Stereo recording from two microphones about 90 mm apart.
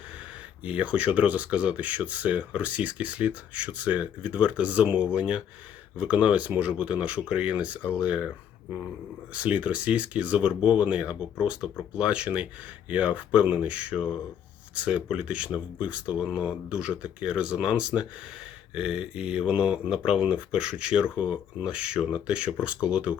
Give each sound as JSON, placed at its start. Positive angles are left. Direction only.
{"t": 0.6, "sound": "speech", "side_deg": -15}
{"t": 9.3, "sound": "speech", "side_deg": -15}